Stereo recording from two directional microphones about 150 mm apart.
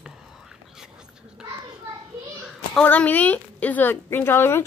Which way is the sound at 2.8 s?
10° left (ahead or behind).